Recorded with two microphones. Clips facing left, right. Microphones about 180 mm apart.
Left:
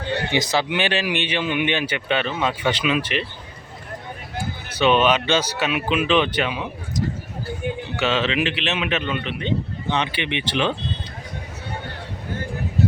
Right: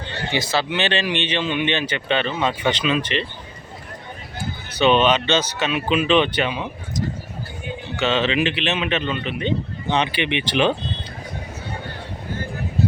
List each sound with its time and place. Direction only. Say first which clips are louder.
0.3 s speech: right 2 dB; 20° left (ahead or behind)
4.8 s speech: right 1 dB; 5° left (ahead or behind)
7.9 s speech: right 2 dB; 5° left (ahead or behind)
9.9 s speech: right 3 dB; 15° right (ahead or behind)